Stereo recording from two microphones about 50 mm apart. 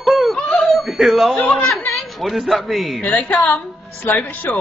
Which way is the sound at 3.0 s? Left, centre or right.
Left.